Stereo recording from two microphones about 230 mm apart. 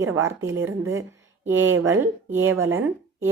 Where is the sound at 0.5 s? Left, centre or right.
Right.